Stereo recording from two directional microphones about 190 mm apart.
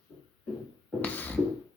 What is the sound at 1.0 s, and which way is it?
Music, 10° left (ahead or behind).